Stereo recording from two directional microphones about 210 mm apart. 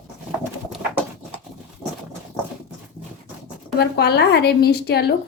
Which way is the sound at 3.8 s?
50° left (ahead or behind).